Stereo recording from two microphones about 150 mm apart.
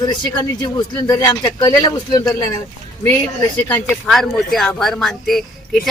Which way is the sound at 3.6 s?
5° left (ahead or behind).